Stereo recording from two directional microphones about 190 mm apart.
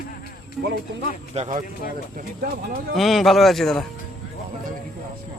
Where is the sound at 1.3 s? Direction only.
35° right (ahead or behind).